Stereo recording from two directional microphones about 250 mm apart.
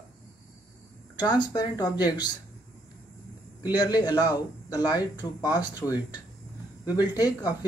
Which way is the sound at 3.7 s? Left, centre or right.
Centre.